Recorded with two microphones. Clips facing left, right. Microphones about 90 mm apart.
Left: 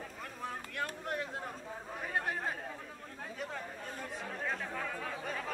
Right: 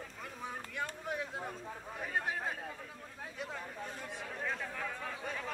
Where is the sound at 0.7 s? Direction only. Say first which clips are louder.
Left 1 dB; centre (ahead or behind).